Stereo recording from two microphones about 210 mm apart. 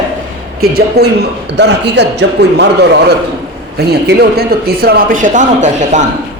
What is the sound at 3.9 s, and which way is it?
Speech, 50° right (ahead or behind).